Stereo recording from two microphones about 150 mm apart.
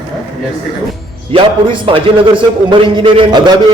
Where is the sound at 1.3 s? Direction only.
35° right (ahead or behind).